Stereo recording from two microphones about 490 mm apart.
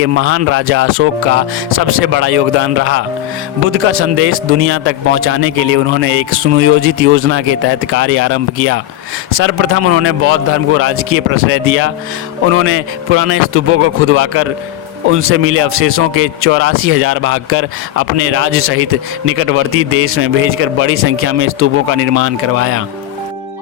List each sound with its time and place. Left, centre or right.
0.0 s a man's voice: right